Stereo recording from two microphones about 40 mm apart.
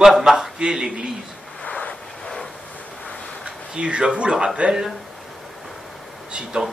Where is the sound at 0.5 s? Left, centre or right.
Centre.